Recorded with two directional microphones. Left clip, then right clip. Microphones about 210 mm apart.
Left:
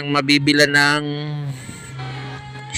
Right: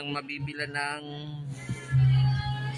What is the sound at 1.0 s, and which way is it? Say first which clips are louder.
Speech: left 13 dB; 25° left (ahead or behind).